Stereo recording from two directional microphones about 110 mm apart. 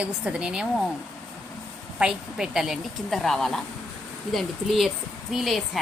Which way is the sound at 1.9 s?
5° right (ahead or behind).